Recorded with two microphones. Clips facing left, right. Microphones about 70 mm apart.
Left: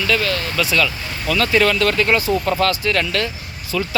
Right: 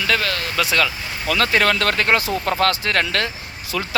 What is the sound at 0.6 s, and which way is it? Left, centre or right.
Speech, right.